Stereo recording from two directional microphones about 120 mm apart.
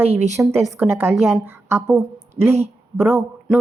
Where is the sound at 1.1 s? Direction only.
5° right (ahead or behind).